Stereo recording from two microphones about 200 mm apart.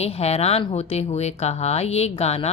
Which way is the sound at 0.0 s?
30° left (ahead or behind).